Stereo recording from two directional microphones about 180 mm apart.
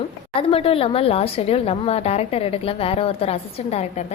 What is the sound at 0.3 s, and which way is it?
A woman's voice, 30° left (ahead or behind).